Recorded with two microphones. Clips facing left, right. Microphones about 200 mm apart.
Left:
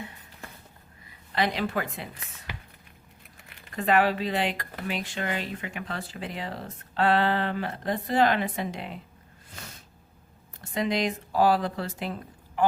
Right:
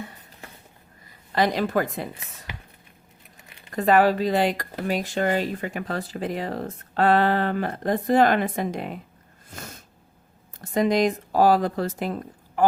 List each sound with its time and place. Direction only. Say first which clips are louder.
1.0 s a woman's voice: right 5 dB; 40° right (ahead or behind)
3.8 s speech: right 5 dB; 40° right (ahead or behind)
10.6 s speech: right 6 dB; 45° right (ahead or behind)